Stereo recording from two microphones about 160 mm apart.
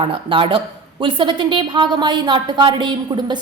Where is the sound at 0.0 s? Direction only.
35° right (ahead or behind).